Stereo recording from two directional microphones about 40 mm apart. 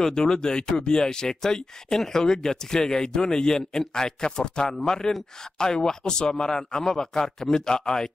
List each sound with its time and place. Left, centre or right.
0.0 s speech: centre